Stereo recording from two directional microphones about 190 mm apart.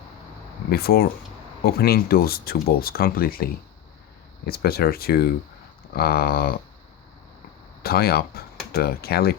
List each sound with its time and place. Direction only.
0.7 s speech: 55° left (ahead or behind)
7.8 s speech: 55° left (ahead or behind)